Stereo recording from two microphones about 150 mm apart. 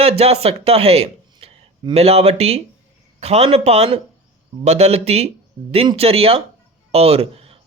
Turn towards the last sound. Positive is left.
turn(degrees=-40)  # may be behind; listen again after turning